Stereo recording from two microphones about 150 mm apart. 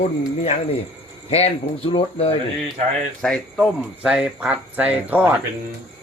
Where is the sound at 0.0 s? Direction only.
45° left (ahead or behind).